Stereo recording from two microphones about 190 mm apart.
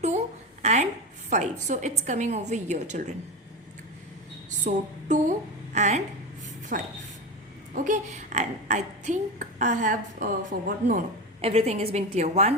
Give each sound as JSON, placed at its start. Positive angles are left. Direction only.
{"t": 0.0, "sound": "a sound", "side_deg": -35}
{"t": 1.3, "sound": "a woman's voice", "side_deg": -40}
{"t": 4.4, "sound": "a sound", "side_deg": -40}
{"t": 5.7, "sound": "a woman's voice", "side_deg": -40}
{"t": 6.7, "sound": "speech", "side_deg": -50}
{"t": 7.9, "sound": "a woman's voice", "side_deg": -40}